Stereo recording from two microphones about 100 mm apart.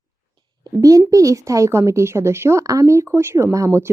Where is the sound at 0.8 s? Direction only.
35° right (ahead or behind).